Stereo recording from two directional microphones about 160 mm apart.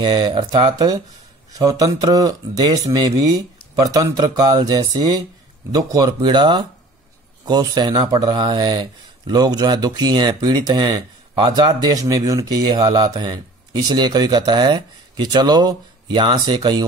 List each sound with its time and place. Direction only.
0.0 s speech: 30° right (ahead or behind)